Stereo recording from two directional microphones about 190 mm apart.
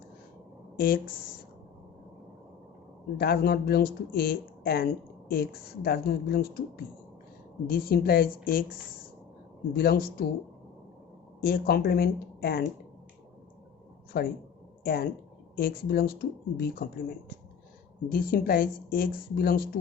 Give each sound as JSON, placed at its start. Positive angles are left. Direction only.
{"t": 0.8, "sound": "speech", "side_deg": 50}
{"t": 3.2, "sound": "speech", "side_deg": 55}
{"t": 9.7, "sound": "speech", "side_deg": 55}
{"t": 11.3, "sound": "speech", "side_deg": 55}
{"t": 14.1, "sound": "speech", "side_deg": 60}
{"t": 18.1, "sound": "speech", "side_deg": 50}